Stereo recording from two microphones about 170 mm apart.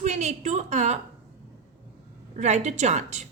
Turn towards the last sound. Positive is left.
turn(degrees=-40)  # may be behind; listen again after turning